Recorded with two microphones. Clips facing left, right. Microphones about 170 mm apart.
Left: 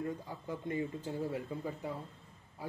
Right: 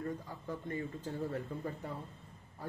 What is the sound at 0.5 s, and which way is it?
Speech, 15° left (ahead or behind).